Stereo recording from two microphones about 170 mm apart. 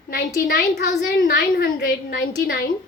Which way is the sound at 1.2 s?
70° left (ahead or behind).